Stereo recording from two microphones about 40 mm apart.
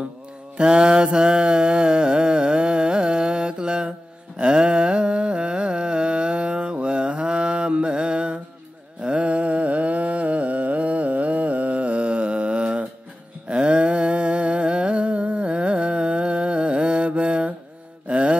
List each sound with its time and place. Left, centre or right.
0.6 s mantra: right
4.4 s carnatic music: right
9.0 s mantra: right
13.5 s humming: right
18.0 s mantra: right